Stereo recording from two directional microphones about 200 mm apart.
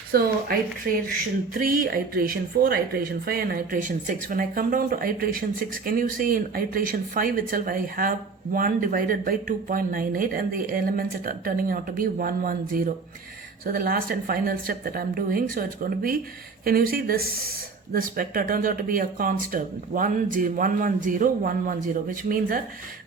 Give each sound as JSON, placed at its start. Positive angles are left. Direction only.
{"t": 0.1, "sound": "speech", "side_deg": -50}